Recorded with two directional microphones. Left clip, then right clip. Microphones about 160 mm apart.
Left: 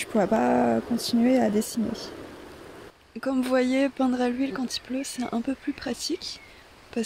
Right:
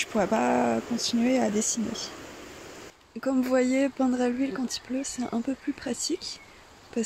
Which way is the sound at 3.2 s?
Centre (ahead or behind).